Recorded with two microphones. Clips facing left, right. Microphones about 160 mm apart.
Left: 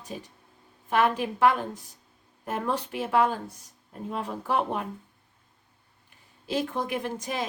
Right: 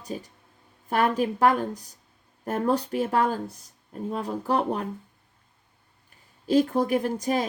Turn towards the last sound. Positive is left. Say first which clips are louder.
# right 6 dB
turn(degrees=-40)  # may be behind; listen again after turning